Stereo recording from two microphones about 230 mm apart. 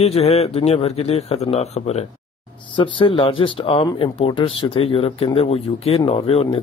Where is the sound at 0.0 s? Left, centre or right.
Left.